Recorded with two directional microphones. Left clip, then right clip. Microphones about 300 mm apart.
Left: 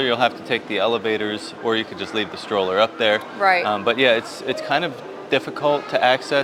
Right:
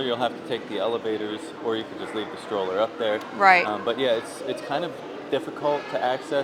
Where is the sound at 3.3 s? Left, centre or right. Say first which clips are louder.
Right 4 dB; centre.